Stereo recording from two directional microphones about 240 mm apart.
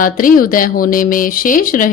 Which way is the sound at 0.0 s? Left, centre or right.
Left.